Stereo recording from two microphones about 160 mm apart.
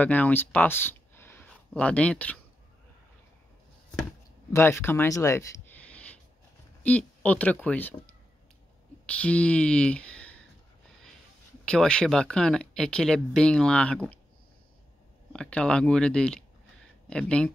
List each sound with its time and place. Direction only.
0.0 s a sound: 10° left (ahead or behind)
1.8 s speech: 10° left (ahead or behind)
4.5 s speech: 15° left (ahead or behind)
9.0 s speech: 10° left (ahead or behind)
11.6 s speech: 5° left (ahead or behind)
15.3 s speech: 5° left (ahead or behind)